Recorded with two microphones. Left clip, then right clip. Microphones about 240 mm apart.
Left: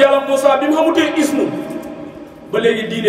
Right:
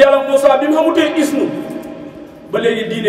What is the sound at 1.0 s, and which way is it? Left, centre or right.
Speech, right.